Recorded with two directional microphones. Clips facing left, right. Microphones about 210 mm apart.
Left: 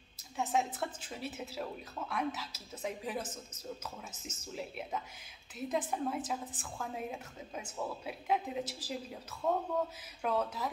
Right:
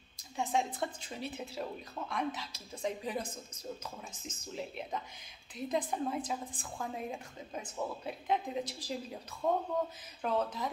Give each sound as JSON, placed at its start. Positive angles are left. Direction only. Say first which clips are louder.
{"t": 0.4, "sound": "a woman's voice", "louder": "even", "side_deg": 5}